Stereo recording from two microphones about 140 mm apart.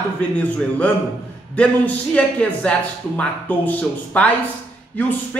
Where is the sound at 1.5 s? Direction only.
10° left (ahead or behind).